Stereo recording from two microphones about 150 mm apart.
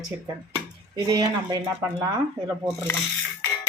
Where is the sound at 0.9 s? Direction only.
25° right (ahead or behind).